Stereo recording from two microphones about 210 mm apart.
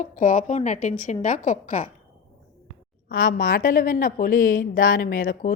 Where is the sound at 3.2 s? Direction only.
40° left (ahead or behind).